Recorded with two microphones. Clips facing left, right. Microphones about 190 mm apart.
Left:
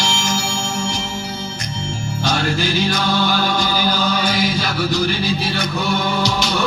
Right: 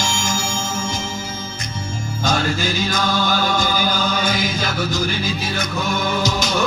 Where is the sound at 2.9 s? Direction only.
45° right (ahead or behind).